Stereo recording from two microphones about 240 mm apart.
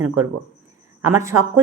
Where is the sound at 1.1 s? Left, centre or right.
Centre.